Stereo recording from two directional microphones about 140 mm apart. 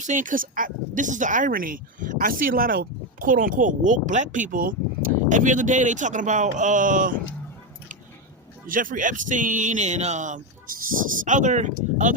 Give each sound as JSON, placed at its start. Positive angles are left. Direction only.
{"t": 0.0, "sound": "speech", "side_deg": -65}
{"t": 8.6, "sound": "speech", "side_deg": -75}